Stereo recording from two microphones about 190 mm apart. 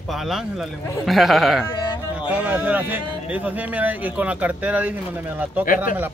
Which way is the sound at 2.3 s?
10° right (ahead or behind).